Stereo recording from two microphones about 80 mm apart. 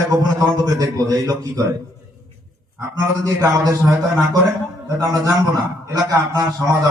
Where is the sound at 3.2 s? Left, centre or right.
Right.